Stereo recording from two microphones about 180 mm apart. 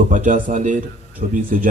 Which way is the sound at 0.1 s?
45° right (ahead or behind).